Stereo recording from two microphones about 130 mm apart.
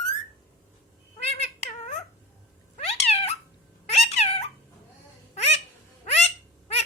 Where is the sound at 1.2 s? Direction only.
55° left (ahead or behind).